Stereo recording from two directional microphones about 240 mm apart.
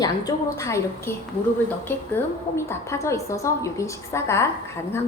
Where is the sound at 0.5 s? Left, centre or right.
Centre.